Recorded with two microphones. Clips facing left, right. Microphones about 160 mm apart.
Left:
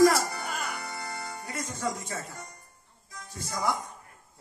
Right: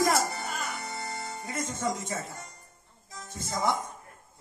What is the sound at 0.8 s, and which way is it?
Music, 20° right (ahead or behind).